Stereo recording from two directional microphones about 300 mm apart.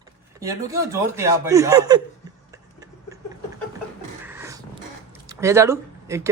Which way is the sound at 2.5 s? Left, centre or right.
Centre.